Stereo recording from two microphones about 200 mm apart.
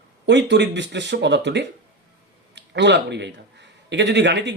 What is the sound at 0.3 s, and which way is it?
A man's voice, 60° right (ahead or behind).